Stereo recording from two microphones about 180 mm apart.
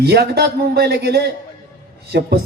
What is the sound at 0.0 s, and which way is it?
A man's voice, 65° right (ahead or behind).